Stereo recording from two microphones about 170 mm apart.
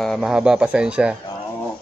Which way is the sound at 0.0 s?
Centre (ahead or behind).